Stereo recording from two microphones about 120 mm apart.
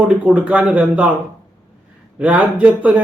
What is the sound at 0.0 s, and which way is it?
Speech, 10° right (ahead or behind).